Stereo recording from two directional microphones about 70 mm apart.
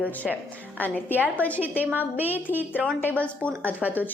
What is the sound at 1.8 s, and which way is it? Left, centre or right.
Speech, right.